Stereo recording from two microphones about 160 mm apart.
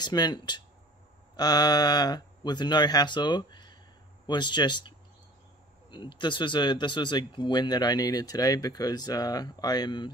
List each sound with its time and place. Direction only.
0.0 s speech: 25° left (ahead or behind)